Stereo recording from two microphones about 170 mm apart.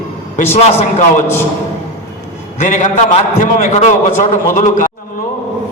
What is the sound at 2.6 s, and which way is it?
A man's voice, 45° left (ahead or behind).